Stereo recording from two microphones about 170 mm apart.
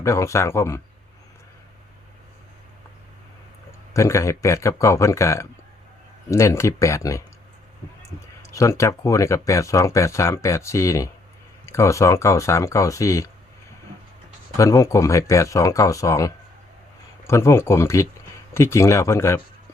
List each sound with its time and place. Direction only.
0.0 s speech: 15° left (ahead or behind)
3.9 s speech: 15° left (ahead or behind)
8.4 s speech: 20° left (ahead or behind)
14.6 s speech: 20° left (ahead or behind)